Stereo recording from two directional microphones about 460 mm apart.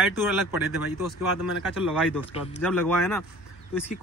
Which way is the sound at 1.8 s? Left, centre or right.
Centre.